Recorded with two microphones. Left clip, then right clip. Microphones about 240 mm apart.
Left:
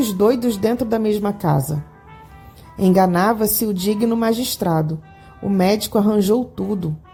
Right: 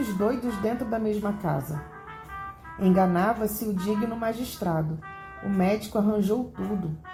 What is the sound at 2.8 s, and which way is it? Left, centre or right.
A woman's voice, left.